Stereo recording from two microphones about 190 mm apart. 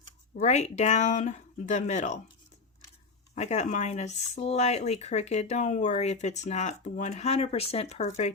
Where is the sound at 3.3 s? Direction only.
35° left (ahead or behind).